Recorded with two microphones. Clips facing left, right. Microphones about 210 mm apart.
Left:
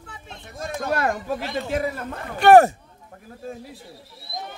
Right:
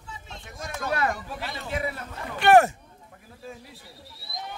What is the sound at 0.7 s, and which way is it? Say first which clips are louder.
A man's voice: left 3 dB; 45° left (ahead or behind).